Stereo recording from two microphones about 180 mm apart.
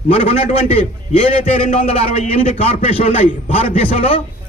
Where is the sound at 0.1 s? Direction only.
35° left (ahead or behind).